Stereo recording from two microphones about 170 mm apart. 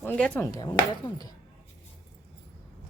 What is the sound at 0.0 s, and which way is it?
Speech, 10° left (ahead or behind).